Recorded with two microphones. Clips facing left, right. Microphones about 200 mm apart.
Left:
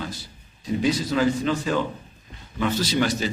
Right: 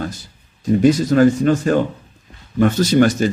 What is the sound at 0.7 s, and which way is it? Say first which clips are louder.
A man's voice: right 9 dB; 50° right (ahead or behind).